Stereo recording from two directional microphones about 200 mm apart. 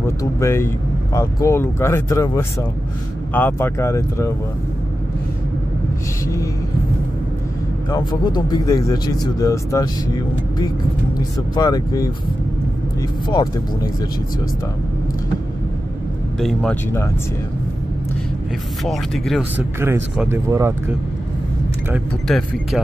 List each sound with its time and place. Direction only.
0.0 s speech: 15° left (ahead or behind)
6.2 s music: 15° left (ahead or behind)
8.1 s speech: 20° left (ahead or behind)
11.1 s speech: 20° left (ahead or behind)
16.3 s speech: centre (ahead or behind)
18.9 s speech: centre (ahead or behind)
19.8 s speech: 10° right (ahead or behind)
21.9 s speech: centre (ahead or behind)